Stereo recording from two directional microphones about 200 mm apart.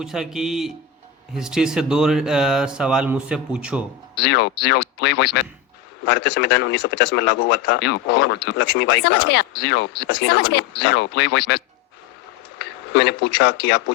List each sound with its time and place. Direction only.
0.0 s speech: centre (ahead or behind)
4.2 s speech: 55° left (ahead or behind)